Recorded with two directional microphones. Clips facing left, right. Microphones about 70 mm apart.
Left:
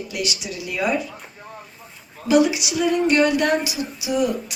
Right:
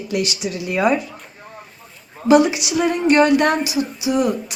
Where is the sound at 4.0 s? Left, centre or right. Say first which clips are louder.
Right 2 dB; right.